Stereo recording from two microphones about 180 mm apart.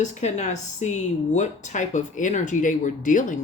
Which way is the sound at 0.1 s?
40° left (ahead or behind).